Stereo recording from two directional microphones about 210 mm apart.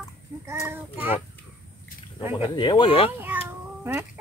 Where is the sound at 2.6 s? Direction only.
20° left (ahead or behind).